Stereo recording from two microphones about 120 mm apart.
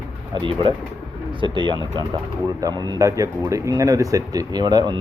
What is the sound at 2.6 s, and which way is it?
Speech, 30° right (ahead or behind).